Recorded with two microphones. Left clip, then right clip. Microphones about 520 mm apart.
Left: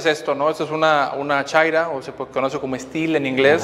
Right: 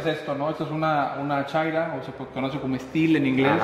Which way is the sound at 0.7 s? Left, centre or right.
Left.